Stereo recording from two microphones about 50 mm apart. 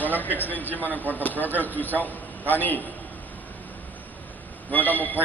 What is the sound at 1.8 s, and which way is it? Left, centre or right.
A man's voice, left.